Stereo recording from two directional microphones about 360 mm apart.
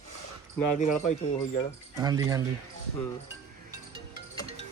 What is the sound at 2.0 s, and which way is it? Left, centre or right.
Speech, centre.